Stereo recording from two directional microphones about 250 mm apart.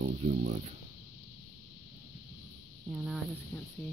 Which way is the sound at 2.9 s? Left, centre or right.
Centre.